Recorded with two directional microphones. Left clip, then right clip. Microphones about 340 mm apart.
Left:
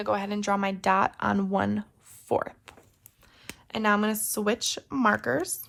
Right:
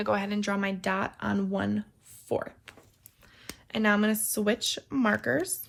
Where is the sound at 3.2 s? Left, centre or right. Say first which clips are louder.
Right 1 dB; centre.